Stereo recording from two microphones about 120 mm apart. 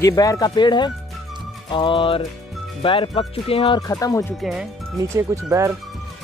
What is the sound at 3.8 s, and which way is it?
Speech, 30° left (ahead or behind).